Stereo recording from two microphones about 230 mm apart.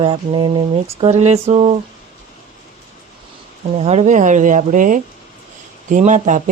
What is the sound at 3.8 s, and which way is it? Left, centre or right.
A woman's voice, right.